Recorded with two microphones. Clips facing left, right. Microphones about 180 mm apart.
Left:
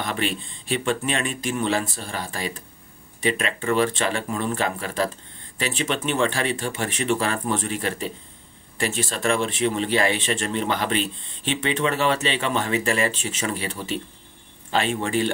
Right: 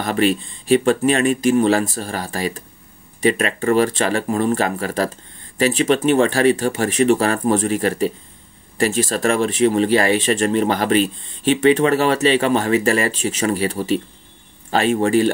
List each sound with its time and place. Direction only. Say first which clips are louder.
0.0 s speech: right 9 dB; 40° right (ahead or behind)